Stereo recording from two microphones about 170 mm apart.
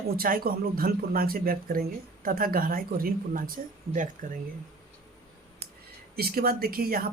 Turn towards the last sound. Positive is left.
turn(degrees=-60)  # may be behind; listen again after turning